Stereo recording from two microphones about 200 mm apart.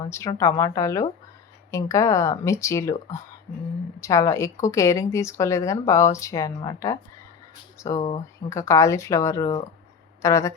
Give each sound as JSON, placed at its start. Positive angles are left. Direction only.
{"t": 0.1, "sound": "a woman's voice", "side_deg": 15}